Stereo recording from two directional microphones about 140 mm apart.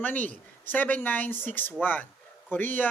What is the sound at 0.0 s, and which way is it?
Speech, 10° left (ahead or behind).